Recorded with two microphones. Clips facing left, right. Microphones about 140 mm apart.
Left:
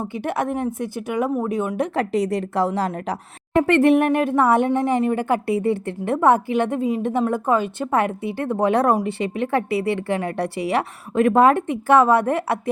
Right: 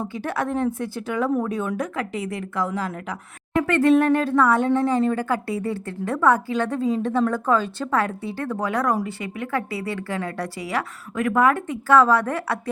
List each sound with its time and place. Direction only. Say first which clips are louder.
0.0 s a woman's voice: left 2 dB; 20° left (ahead or behind)
2.0 s a woman's voice: left 7 dB; 35° left (ahead or behind)